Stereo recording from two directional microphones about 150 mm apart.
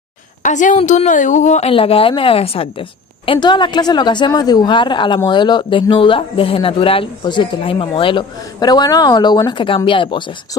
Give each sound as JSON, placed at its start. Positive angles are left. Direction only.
{"t": 0.4, "sound": "a woman's voice", "side_deg": 55}